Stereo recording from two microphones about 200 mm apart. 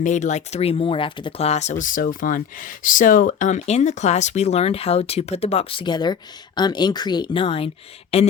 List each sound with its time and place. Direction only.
0.0 s speech: 35° left (ahead or behind)